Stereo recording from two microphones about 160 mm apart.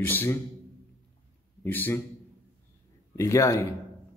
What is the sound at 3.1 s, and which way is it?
Speech, 20° left (ahead or behind).